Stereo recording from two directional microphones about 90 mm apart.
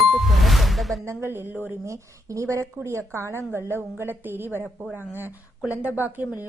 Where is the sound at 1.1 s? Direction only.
30° right (ahead or behind).